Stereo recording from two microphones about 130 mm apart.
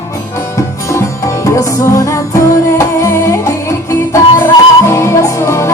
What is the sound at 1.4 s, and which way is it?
Music, 25° left (ahead or behind).